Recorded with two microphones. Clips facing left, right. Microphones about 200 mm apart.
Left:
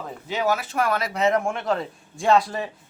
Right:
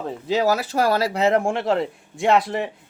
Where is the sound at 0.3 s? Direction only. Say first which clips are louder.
Right 4 dB; 35° right (ahead or behind).